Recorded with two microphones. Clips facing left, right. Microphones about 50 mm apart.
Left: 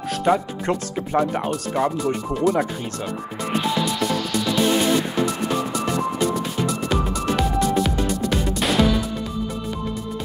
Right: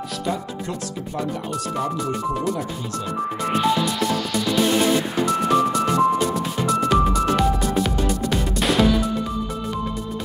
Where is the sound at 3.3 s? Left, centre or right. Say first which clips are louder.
Right 1 dB; centre.